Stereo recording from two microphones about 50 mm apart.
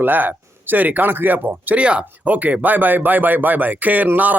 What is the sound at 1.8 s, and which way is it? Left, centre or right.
Speech, right.